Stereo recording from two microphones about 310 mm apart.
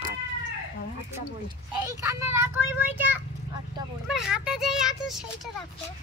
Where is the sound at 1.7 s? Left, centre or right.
Centre.